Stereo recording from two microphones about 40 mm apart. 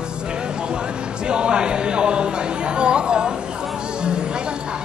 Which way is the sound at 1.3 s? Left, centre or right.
Right.